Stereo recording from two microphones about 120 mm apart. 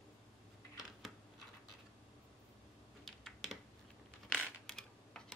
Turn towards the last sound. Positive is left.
turn(degrees=5)  # may be behind; listen again after turning